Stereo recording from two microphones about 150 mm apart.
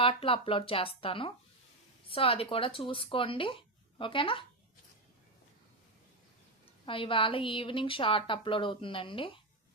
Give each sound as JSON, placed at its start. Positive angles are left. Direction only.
{"t": 0.0, "sound": "a woman's voice", "side_deg": 40}
{"t": 6.8, "sound": "a woman's voice", "side_deg": 35}